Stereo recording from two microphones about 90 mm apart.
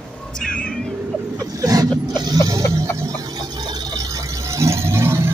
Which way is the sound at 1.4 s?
40° right (ahead or behind).